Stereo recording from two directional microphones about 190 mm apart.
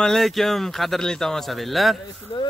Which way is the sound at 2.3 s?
25° left (ahead or behind).